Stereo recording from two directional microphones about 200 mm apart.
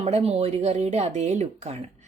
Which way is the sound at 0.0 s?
30° right (ahead or behind).